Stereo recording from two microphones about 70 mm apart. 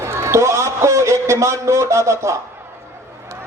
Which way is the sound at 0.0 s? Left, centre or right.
Right.